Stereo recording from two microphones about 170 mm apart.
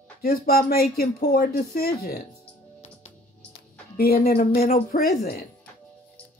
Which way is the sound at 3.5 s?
65° left (ahead or behind).